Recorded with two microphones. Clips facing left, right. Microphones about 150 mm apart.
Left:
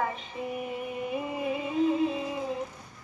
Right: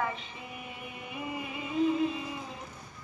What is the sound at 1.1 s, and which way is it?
Music, 30° left (ahead or behind).